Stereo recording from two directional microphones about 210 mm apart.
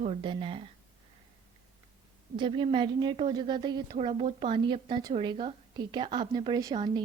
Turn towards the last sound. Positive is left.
turn(degrees=-20)  # may be behind; listen again after turning